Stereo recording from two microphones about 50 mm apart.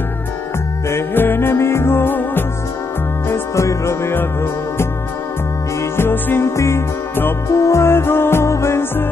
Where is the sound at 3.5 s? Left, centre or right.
Left.